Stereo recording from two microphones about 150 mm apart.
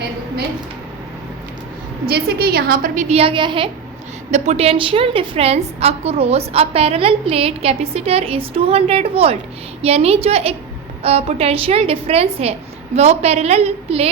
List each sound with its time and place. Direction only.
2.0 s a woman's voice: 90° right; by 3.7 s 35° right (ahead or behind)
4.3 s a woman's voice: 50° right (ahead or behind)